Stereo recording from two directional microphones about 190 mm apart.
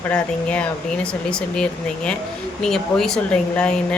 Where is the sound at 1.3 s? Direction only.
5° left (ahead or behind).